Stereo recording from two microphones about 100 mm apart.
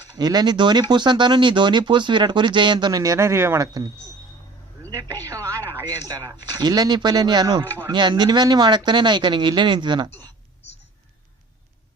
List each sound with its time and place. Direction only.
0.2 s speech: 45° right (ahead or behind)
3.0 s speech: 30° right (ahead or behind)
4.8 s a sound: 35° right (ahead or behind)
5.2 s speech: 30° right (ahead or behind); by 10.1 s 50° right (ahead or behind)
10.1 s speech: 20° left (ahead or behind)